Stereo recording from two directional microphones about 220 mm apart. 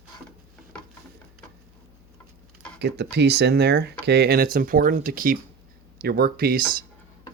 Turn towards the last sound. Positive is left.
turn(degrees=-45)  # may be behind; listen again after turning